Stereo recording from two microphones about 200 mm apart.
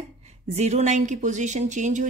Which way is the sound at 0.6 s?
35° right (ahead or behind).